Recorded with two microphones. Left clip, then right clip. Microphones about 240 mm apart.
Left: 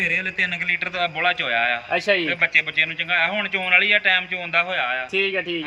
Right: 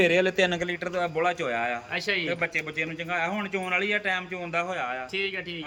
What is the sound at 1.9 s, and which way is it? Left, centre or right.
Speech, centre.